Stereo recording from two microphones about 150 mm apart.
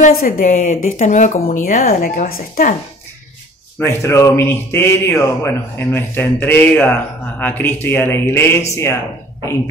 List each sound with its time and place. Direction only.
0.1 s speech: 70° left (ahead or behind)
3.8 s speech: 20° left (ahead or behind)